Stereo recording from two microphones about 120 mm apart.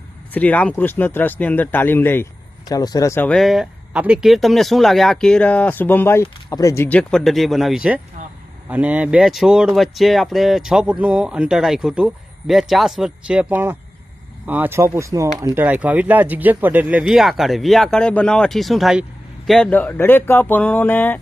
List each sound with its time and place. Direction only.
0.3 s speech: 10° left (ahead or behind)
2.6 s speech: 30° left (ahead or behind)
3.3 s speech: centre (ahead or behind); by 6.8 s 25° left (ahead or behind)
6.8 s speech: 10° left (ahead or behind)
7.2 s speech: centre (ahead or behind); by 15.6 s 25° right (ahead or behind)
15.6 s speech: 15° right (ahead or behind)
19.7 s speech: 15° left (ahead or behind)